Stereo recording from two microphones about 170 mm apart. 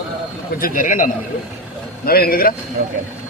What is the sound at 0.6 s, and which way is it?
Speech, 50° left (ahead or behind).